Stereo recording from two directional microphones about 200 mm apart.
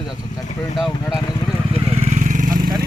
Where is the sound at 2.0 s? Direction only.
40° right (ahead or behind).